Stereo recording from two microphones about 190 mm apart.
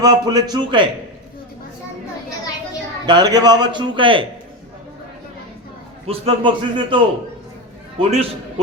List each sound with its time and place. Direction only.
0.0 s a man's voice: 20° right (ahead or behind)
3.1 s a man's voice: 20° right (ahead or behind)
6.1 s a man's voice: 30° right (ahead or behind)